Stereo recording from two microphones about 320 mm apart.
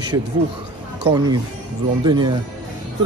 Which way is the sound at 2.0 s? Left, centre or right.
Centre.